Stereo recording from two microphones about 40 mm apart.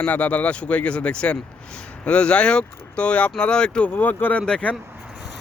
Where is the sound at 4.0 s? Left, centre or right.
Left.